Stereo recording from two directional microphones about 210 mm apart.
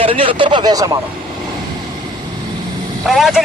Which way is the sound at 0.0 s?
25° right (ahead or behind).